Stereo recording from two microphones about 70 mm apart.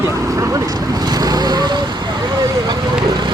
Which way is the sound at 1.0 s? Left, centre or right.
Right.